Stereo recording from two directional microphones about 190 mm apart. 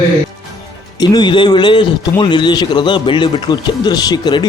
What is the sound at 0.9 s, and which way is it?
A man's voice, 20° left (ahead or behind).